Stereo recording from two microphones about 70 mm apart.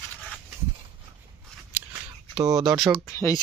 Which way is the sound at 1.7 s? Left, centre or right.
Right.